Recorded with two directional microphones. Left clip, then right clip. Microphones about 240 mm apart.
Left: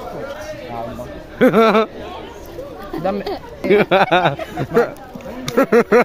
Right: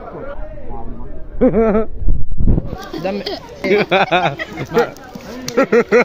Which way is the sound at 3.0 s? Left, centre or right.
Centre.